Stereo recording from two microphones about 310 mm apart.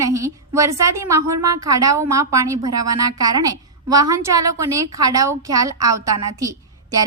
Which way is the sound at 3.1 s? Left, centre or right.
Centre.